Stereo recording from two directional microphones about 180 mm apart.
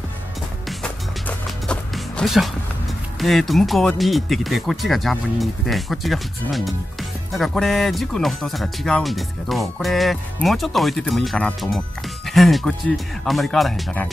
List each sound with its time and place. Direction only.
1.7 s music: centre (ahead or behind)
3.2 s speech: centre (ahead or behind)